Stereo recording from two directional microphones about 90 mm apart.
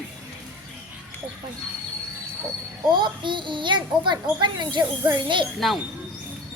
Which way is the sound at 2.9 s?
60° right (ahead or behind).